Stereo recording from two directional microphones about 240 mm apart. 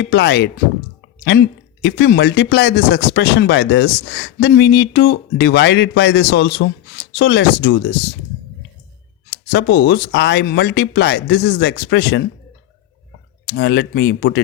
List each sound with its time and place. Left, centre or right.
0.0 s speech: left
9.3 s speech: left
13.4 s speech: left